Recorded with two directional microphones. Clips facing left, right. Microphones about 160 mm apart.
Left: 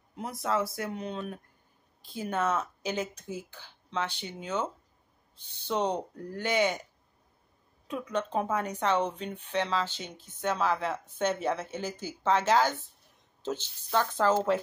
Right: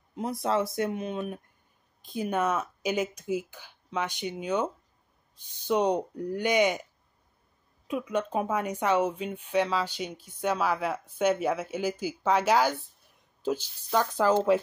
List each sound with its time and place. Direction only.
0.1 s speech: 25° right (ahead or behind)
7.9 s speech: 10° right (ahead or behind)